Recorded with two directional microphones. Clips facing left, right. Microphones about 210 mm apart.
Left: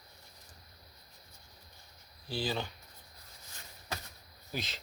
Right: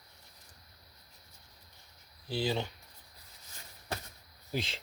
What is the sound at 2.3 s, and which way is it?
Speech, 20° right (ahead or behind).